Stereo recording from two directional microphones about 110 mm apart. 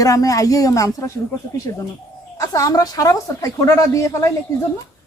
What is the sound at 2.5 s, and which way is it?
A woman's voice, 30° left (ahead or behind).